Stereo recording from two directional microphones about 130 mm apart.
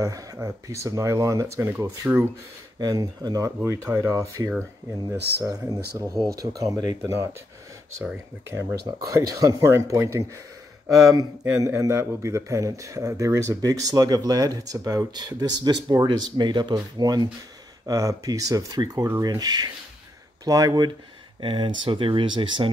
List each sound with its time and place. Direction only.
0.0 s a man's voice: 25° right (ahead or behind)
2.8 s a man's voice: 30° right (ahead or behind)
8.5 s a man's voice: 20° right (ahead or behind); by 22.7 s 40° right (ahead or behind)